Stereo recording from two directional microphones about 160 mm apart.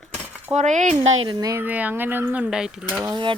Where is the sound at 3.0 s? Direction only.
25° right (ahead or behind).